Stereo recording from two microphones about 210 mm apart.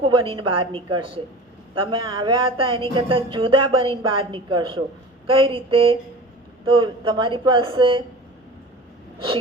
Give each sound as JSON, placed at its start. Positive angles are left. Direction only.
{"t": 0.0, "sound": "a woman's voice", "side_deg": -25}